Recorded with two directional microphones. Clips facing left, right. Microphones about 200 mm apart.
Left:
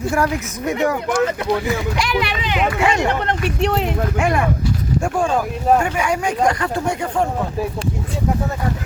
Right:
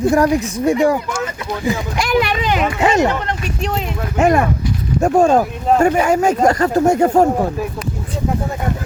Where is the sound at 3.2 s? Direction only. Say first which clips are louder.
Left 3 dB; 65° left (ahead or behind).